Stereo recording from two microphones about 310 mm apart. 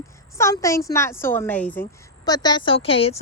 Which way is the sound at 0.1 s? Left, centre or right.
Centre.